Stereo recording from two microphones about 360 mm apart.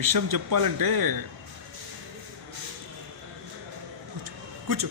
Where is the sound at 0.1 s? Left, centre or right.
Right.